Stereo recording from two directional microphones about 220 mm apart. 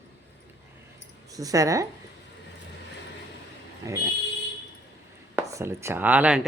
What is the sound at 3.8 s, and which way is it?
Speech, 15° right (ahead or behind).